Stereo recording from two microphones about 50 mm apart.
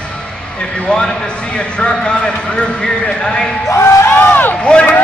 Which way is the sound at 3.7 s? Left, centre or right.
Left.